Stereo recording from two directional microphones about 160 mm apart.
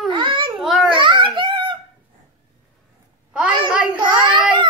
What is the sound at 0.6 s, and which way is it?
Babbling, centre (ahead or behind).